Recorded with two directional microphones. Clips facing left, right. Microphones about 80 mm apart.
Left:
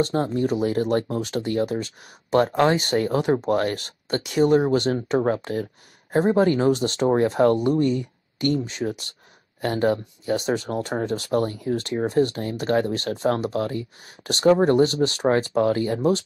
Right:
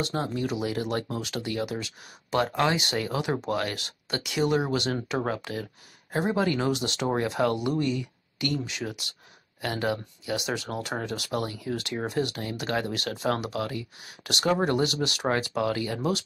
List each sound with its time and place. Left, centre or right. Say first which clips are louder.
0.0 s speech: left 7 dB; left